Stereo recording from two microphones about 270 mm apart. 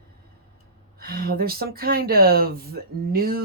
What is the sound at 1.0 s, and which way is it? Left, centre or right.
Speech, right.